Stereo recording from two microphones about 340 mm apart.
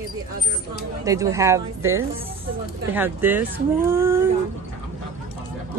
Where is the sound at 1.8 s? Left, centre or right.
Right.